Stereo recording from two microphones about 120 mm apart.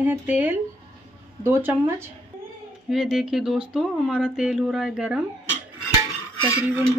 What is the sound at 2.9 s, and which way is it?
Speech, 5° right (ahead or behind).